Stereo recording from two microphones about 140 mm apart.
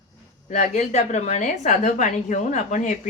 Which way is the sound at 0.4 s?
65° left (ahead or behind).